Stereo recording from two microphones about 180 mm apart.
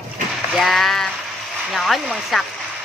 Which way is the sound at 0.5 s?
Centre (ahead or behind).